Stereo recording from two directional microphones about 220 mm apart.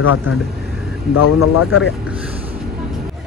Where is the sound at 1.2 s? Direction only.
85° left.